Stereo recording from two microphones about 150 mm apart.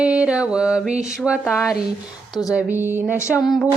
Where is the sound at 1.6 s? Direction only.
5° right (ahead or behind).